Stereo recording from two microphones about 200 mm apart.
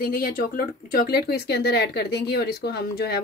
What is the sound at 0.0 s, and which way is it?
Speech, 45° left (ahead or behind).